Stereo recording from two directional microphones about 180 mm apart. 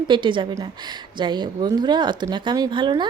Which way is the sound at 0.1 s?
25° right (ahead or behind).